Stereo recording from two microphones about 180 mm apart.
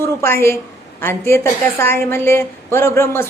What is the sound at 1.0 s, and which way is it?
A woman's voice, 15° left (ahead or behind).